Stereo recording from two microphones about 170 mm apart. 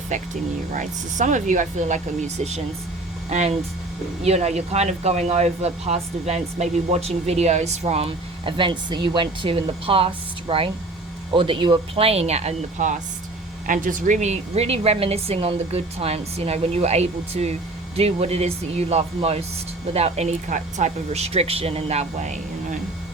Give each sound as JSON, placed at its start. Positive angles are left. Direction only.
{"t": 0.1, "sound": "speech", "side_deg": -45}